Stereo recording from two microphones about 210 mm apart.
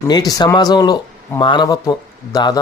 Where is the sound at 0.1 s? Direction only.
20° left (ahead or behind).